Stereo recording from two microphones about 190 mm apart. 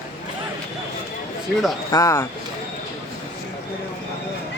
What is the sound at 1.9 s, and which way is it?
Speech, 15° left (ahead or behind).